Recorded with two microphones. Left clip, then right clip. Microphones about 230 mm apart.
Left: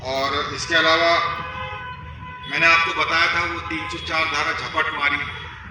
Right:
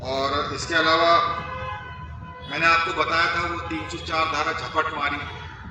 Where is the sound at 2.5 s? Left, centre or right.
Right.